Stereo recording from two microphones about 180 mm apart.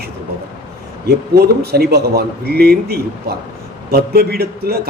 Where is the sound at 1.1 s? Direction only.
60° right (ahead or behind).